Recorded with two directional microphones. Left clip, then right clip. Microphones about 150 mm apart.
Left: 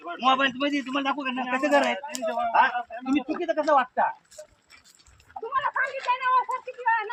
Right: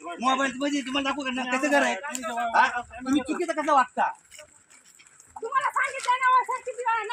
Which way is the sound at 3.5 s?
Centre (ahead or behind).